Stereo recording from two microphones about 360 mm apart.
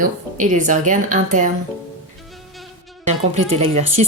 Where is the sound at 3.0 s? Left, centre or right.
Centre.